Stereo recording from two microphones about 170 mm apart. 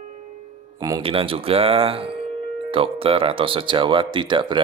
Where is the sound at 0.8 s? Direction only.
20° right (ahead or behind).